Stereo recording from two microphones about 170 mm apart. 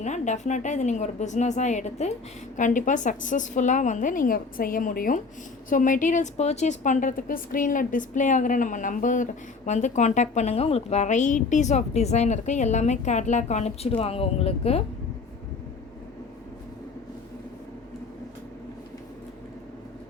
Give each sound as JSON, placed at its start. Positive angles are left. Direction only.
{"t": 0.0, "sound": "a woman's voice", "side_deg": 45}